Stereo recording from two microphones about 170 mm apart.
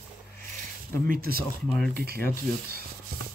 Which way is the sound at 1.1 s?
60° right (ahead or behind).